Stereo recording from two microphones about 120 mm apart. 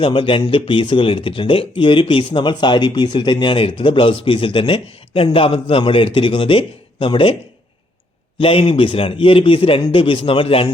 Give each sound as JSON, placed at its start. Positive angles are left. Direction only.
{"t": 0.0, "sound": "speech", "side_deg": 45}
{"t": 8.4, "sound": "speech", "side_deg": 50}